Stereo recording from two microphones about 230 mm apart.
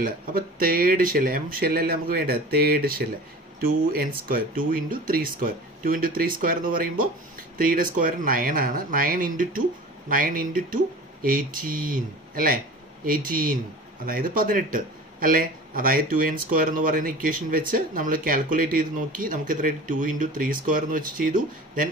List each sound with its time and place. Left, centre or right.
0.0 s speech: right